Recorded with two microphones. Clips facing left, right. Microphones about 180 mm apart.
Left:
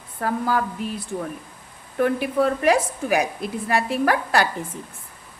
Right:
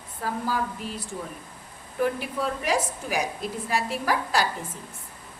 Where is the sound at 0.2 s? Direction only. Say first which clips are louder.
Left 6 dB; 60° left (ahead or behind).